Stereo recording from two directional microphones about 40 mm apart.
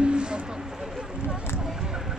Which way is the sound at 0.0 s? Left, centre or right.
Right.